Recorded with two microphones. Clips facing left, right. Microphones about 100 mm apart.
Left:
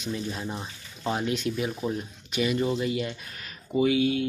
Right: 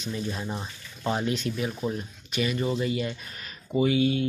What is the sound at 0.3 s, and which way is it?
Speech, centre (ahead or behind).